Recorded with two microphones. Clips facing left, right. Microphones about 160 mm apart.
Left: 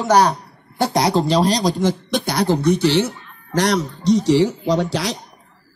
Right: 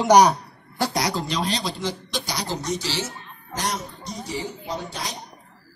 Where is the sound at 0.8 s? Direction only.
25° left (ahead or behind); by 5.2 s 90° left.